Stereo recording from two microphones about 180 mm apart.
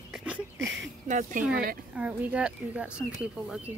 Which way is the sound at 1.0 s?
40° right (ahead or behind).